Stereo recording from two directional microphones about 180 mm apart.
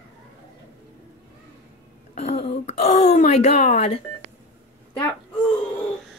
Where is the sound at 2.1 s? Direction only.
35° left (ahead or behind).